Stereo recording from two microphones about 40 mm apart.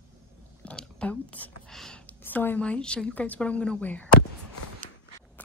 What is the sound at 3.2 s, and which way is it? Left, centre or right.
Speech, left.